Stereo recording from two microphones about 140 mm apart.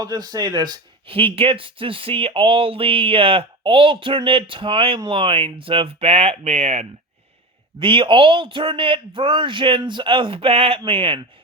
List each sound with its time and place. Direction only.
0.0 s speech: 30° right (ahead or behind); by 6.8 s 55° right (ahead or behind)
7.8 s speech: 40° right (ahead or behind)